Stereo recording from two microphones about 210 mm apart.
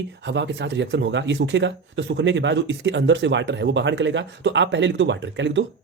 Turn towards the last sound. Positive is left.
turn(degrees=-60)  # may be behind; listen again after turning